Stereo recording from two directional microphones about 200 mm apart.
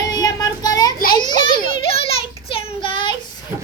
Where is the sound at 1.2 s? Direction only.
25° left (ahead or behind).